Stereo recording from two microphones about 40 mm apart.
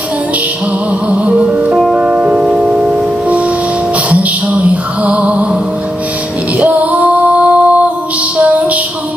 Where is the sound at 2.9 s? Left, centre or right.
Right.